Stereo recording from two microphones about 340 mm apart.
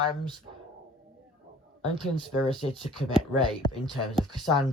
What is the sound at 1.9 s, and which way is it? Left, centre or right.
Speech, centre.